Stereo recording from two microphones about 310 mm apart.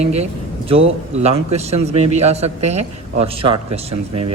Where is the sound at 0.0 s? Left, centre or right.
Right.